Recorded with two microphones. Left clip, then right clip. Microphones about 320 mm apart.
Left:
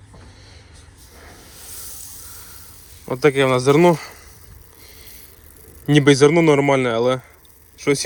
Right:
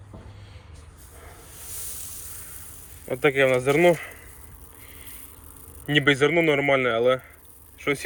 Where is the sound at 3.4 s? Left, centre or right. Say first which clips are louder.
Left 4 dB; centre.